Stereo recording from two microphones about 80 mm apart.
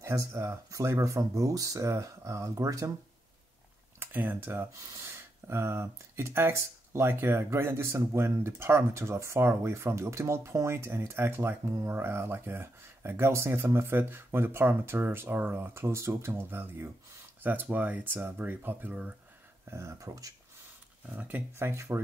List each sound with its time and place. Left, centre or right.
0.0 s speech: right
4.0 s speech: right
19.7 s speech: right
21.1 s speech: centre
21.5 s speech: right